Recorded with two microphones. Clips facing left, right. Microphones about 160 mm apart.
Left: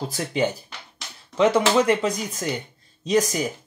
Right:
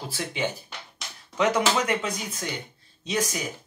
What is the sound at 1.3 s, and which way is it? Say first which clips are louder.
Speech: left 5 dB; 30° left (ahead or behind).